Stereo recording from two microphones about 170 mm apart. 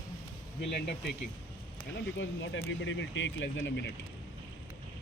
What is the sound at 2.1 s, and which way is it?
Speech, 90° left.